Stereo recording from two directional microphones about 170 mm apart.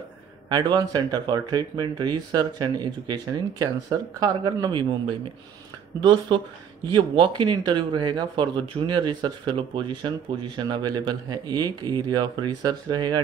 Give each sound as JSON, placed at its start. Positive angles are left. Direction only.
{"t": 0.5, "sound": "speech", "side_deg": -25}
{"t": 5.9, "sound": "speech", "side_deg": -25}